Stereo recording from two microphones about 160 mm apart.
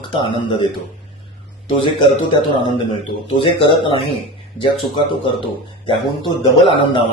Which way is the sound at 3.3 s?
30° left (ahead or behind).